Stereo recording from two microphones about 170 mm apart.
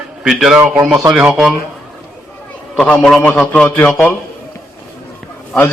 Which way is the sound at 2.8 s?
5° left (ahead or behind).